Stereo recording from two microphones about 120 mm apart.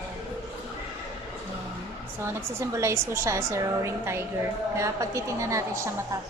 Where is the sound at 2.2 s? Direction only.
25° right (ahead or behind).